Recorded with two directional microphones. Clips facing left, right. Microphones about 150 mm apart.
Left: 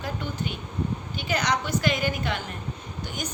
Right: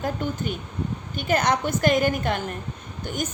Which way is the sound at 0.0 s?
50° right (ahead or behind).